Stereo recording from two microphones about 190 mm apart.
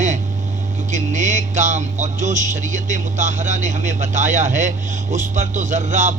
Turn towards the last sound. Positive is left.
turn(degrees=-40)  # may be behind; listen again after turning